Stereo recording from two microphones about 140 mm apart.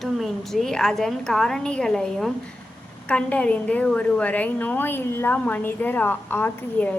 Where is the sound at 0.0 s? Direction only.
Centre (ahead or behind).